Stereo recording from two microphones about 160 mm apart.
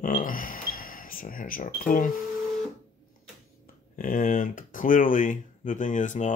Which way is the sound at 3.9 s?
60° left (ahead or behind).